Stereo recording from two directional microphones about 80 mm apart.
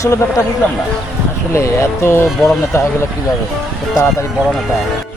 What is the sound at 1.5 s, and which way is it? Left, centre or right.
Speech, left.